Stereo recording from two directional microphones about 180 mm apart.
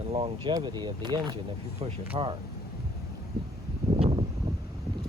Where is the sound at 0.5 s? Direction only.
25° right (ahead or behind).